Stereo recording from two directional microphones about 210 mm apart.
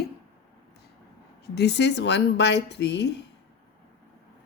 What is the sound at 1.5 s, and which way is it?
A woman's voice, 55° left (ahead or behind).